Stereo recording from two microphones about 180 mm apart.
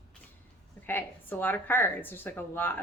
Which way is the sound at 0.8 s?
10° left (ahead or behind).